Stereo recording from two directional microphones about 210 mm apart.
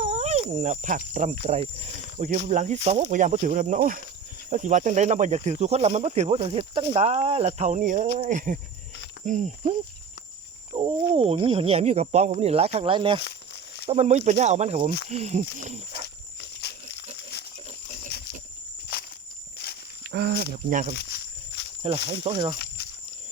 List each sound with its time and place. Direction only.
0.0 s speech: 30° right (ahead or behind)
16.4 s walk: 55° left (ahead or behind)
17.3 s pig: 50° left (ahead or behind)
18.9 s walk: 50° left (ahead or behind)
19.6 s a sound: 50° left (ahead or behind)
20.1 s speech: 50° right (ahead or behind)
20.7 s speech: 40° right (ahead or behind)
20.9 s walk: 50° left (ahead or behind)
22.1 s speech: 25° right (ahead or behind)
22.5 s snake: 50° left (ahead or behind)